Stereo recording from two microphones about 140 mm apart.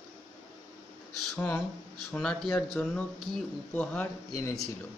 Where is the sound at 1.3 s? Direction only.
10° left (ahead or behind).